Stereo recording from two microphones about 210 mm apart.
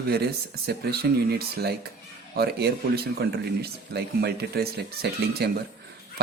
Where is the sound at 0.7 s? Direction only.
50° right (ahead or behind).